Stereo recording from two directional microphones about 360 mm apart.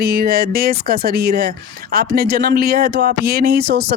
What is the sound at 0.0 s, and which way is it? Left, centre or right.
Speech, right.